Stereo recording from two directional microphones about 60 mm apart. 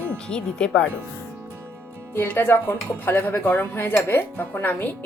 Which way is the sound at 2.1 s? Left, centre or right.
Left.